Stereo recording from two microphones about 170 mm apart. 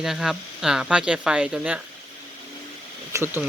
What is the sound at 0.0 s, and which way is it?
Speech, centre (ahead or behind).